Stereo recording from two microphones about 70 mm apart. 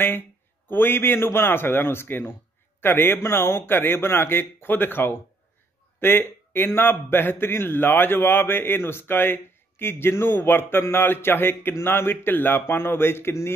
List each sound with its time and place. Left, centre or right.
0.7 s a man's voice: left